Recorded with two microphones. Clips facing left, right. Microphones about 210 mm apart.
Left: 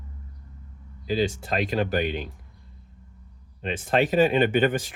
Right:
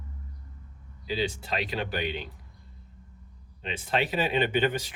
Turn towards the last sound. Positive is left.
turn(degrees=50)  # may be behind; listen again after turning